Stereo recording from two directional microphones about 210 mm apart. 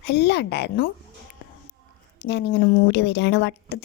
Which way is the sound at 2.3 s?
55° left (ahead or behind).